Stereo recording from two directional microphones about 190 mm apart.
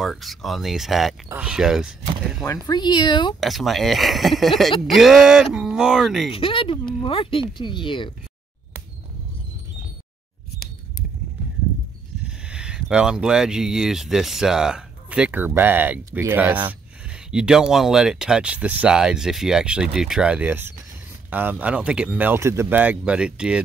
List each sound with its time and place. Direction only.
0.0 s speech: centre (ahead or behind)
2.4 s speech: 20° left (ahead or behind)
3.3 s speech: centre (ahead or behind)
6.3 s speech: 30° left (ahead or behind)
12.3 s speech: 5° right (ahead or behind)